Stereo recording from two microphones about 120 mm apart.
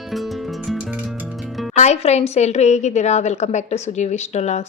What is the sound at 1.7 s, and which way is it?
A woman's voice, 70° left (ahead or behind).